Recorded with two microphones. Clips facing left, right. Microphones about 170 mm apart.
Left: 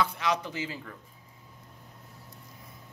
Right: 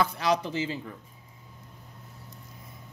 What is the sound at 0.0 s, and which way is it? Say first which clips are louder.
Speech: right 3 dB; 35° right (ahead or behind).